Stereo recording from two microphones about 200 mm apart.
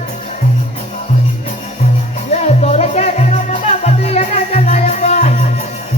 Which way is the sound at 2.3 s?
35° left (ahead or behind).